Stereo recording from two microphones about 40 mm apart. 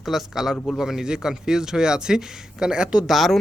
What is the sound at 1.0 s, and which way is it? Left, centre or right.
Speech, right.